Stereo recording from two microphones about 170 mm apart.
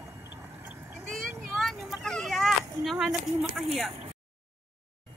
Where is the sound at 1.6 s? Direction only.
Centre (ahead or behind).